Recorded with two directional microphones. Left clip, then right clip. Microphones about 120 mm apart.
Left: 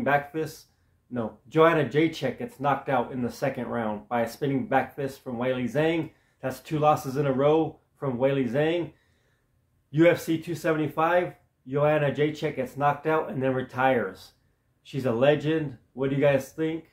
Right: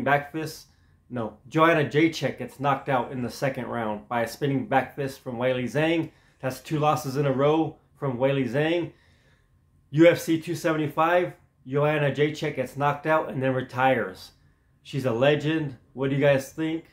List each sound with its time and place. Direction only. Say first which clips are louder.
0.0 s speech: right 1 dB; 20° right (ahead or behind)
9.8 s speech: right 3 dB; 20° right (ahead or behind)